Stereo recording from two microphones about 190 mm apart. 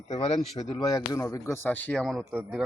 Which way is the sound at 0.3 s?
20° left (ahead or behind).